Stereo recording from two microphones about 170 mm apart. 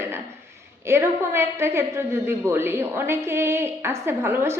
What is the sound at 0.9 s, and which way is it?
A woman's voice, 15° right (ahead or behind).